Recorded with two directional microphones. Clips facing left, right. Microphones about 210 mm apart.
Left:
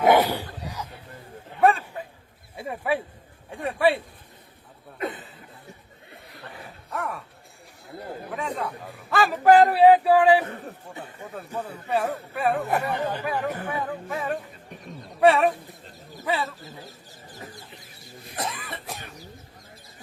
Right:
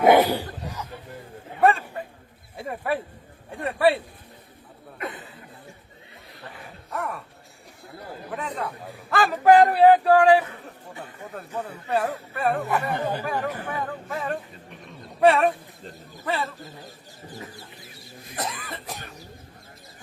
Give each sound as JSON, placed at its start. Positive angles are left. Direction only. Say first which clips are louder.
{"t": 0.2, "sound": "speech", "louder": "right 3 dB", "side_deg": -10}
{"t": 2.6, "sound": "a man's voice", "louder": "left 1 dB", "side_deg": 0}
{"t": 4.9, "sound": "speech", "louder": "left 3 dB", "side_deg": 25}
{"t": 6.9, "sound": "a man's voice", "louder": "right 1 dB", "side_deg": 0}
{"t": 8.3, "sound": "a man's voice", "louder": "even", "side_deg": 0}
{"t": 18.3, "sound": "a man's voice", "louder": "even", "side_deg": 0}